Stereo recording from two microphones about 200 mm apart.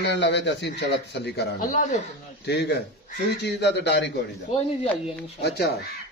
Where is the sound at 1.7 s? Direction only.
40° left (ahead or behind).